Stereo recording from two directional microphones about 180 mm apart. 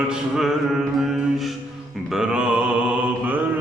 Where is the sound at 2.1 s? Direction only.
5° right (ahead or behind).